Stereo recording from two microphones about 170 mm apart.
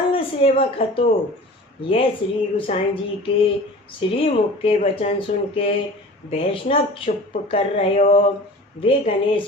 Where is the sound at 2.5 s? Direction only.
30° left (ahead or behind).